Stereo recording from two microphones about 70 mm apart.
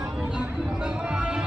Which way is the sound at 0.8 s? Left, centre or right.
Centre.